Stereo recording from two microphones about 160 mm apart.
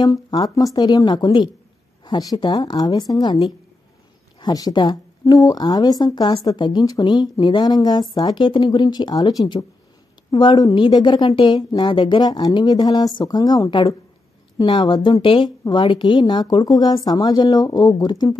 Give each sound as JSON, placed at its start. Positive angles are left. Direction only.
{"t": 0.0, "sound": "speech", "side_deg": 25}
{"t": 4.4, "sound": "speech", "side_deg": 25}